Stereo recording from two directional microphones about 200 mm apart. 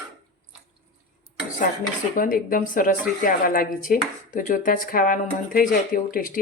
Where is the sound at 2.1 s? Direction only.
45° left (ahead or behind).